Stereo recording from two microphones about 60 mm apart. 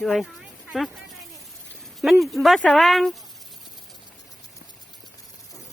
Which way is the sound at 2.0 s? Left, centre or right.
Centre.